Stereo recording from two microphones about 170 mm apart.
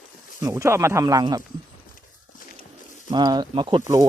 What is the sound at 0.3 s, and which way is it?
Speech, 15° right (ahead or behind).